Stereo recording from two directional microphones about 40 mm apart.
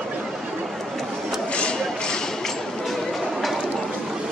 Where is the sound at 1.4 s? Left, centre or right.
Left.